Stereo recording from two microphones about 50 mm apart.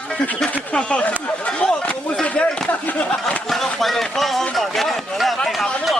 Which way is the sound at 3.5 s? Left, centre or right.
Centre.